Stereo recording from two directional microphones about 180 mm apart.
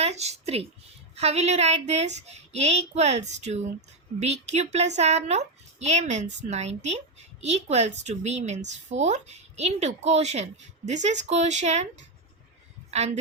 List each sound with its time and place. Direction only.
0.0 s a woman's voice: 35° right (ahead or behind)